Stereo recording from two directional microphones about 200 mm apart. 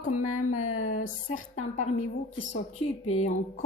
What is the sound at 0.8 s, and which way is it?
Speech, 40° left (ahead or behind).